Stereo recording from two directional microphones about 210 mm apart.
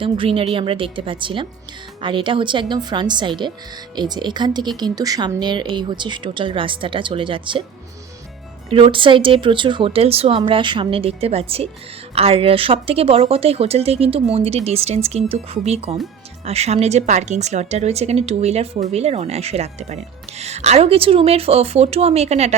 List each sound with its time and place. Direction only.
0.0 s speech: 25° right (ahead or behind)
8.7 s a woman's voice: 25° right (ahead or behind)